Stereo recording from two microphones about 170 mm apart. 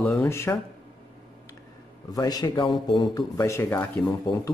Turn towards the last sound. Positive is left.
turn(degrees=20)  # may be behind; listen again after turning